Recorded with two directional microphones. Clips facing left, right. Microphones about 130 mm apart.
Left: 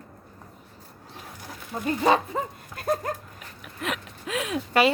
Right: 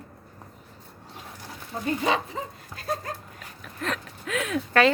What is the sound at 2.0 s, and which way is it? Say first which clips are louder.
Speech: left 8 dB; 50° left (ahead or behind).